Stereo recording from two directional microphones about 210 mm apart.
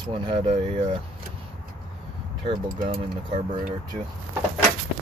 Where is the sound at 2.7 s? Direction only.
40° right (ahead or behind).